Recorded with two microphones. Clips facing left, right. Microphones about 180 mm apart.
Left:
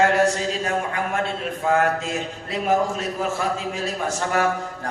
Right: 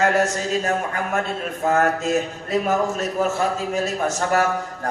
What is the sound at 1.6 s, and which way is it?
A man's voice, 45° right (ahead or behind).